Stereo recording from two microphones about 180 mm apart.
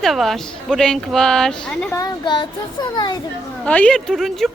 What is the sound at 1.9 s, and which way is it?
Speech, 25° left (ahead or behind).